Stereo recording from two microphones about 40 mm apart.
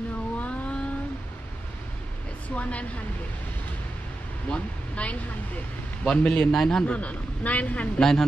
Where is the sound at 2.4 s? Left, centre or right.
Left.